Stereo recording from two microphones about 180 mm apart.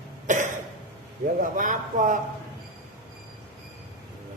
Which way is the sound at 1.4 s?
45° right (ahead or behind).